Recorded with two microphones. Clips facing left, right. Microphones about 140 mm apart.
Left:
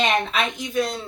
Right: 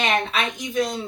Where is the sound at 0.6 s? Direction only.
15° right (ahead or behind).